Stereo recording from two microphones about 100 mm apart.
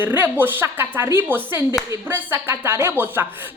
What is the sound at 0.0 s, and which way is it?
A woman's voice, 20° right (ahead or behind).